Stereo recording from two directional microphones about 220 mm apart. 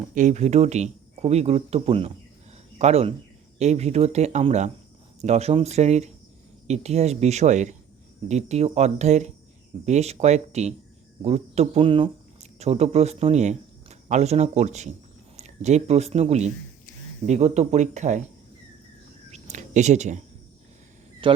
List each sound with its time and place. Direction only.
0.1 s speech: 35° right (ahead or behind)
19.3 s a sound: 30° right (ahead or behind)
21.2 s speech: 25° right (ahead or behind)